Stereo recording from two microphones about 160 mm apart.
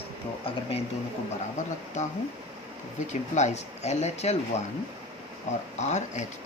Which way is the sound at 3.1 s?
45° left (ahead or behind).